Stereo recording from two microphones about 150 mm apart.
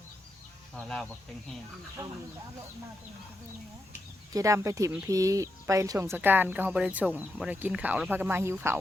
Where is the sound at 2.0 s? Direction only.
25° right (ahead or behind).